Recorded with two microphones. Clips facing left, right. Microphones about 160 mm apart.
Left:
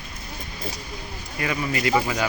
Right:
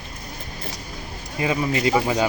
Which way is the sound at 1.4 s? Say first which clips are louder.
Right 4 dB; 25° right (ahead or behind).